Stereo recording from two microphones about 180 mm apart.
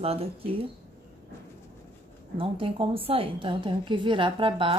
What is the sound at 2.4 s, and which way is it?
A woman's voice, 30° right (ahead or behind).